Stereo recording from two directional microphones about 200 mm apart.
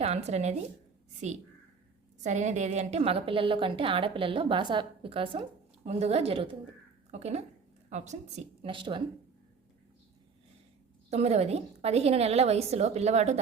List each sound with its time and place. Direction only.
0.0 s a woman's voice: 35° right (ahead or behind)
2.2 s a woman's voice: 35° right (ahead or behind)
8.6 s a woman's voice: 25° right (ahead or behind)
11.1 s a woman's voice: 30° right (ahead or behind)